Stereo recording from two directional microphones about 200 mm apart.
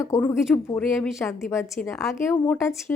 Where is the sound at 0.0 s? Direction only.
10° left (ahead or behind).